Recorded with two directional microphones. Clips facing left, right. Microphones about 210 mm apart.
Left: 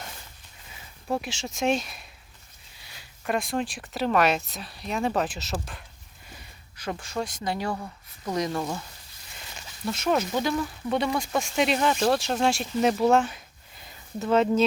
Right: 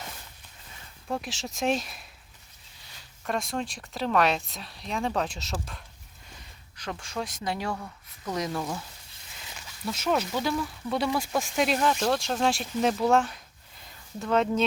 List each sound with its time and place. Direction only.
1.1 s speech: centre (ahead or behind)
3.2 s speech: centre (ahead or behind)
6.7 s speech: 5° left (ahead or behind)
7.8 s speech: 15° left (ahead or behind)
8.4 s speech: centre (ahead or behind)
9.8 s speech: centre (ahead or behind)